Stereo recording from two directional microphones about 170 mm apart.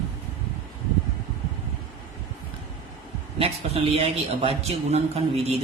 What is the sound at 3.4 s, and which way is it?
A man's voice, 35° right (ahead or behind).